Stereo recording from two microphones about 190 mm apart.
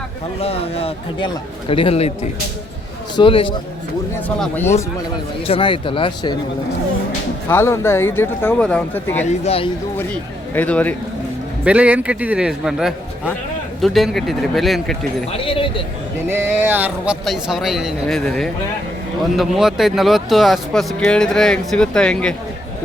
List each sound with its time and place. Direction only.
0.3 s speech: 30° left (ahead or behind)
4.4 s speech: 10° left (ahead or behind)
5.5 s speech: 25° left (ahead or behind)
7.4 s speech: 15° left (ahead or behind)
9.4 s speech: 30° left (ahead or behind)
10.1 s speech: 5° left (ahead or behind)
11.6 s a man's voice: 5° right (ahead or behind)
15.3 s speech: 30° left (ahead or behind)
16.3 s speech: 10° right (ahead or behind); by 22.4 s 5° left (ahead or behind)